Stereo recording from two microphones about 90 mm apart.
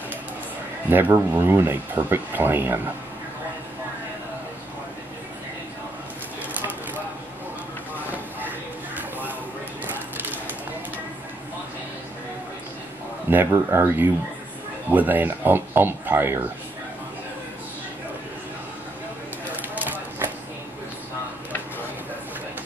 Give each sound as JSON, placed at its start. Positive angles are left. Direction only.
{"t": 0.8, "sound": "speech", "side_deg": -20}
{"t": 8.1, "sound": "train", "side_deg": -20}
{"t": 13.3, "sound": "speech", "side_deg": -25}
{"t": 19.5, "sound": "a sound", "side_deg": -20}